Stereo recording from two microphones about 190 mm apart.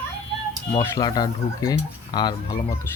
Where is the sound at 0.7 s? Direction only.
20° left (ahead or behind).